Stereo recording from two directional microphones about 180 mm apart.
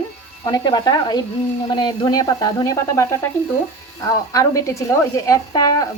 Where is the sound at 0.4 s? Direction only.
25° left (ahead or behind).